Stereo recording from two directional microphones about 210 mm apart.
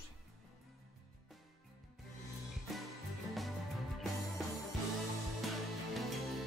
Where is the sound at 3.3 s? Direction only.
Centre (ahead or behind).